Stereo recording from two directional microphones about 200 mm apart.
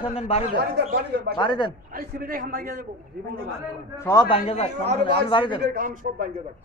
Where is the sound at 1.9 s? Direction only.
45° right (ahead or behind).